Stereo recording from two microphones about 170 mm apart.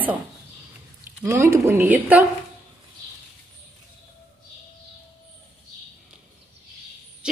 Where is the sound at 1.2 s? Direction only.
15° right (ahead or behind).